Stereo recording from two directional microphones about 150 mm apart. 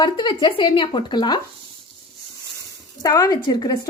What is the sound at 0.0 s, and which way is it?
A woman's voice, 30° left (ahead or behind).